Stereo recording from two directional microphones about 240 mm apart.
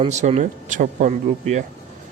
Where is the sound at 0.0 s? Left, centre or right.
Right.